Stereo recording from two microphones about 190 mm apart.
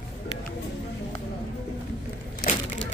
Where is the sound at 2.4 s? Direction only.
60° left (ahead or behind).